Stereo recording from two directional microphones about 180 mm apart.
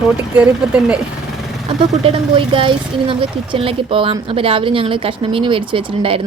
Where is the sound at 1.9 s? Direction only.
35° right (ahead or behind).